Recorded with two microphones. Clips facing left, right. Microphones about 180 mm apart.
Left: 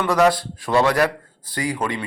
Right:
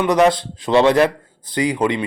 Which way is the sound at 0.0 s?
20° right (ahead or behind).